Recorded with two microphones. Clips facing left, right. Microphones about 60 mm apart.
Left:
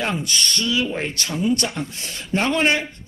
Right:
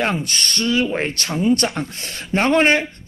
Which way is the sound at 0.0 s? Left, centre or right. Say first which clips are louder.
Right 2 dB; right.